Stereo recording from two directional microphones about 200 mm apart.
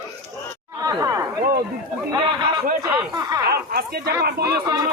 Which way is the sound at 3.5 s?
50° right (ahead or behind).